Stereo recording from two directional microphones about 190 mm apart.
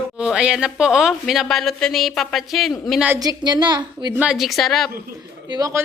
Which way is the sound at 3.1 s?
20° right (ahead or behind).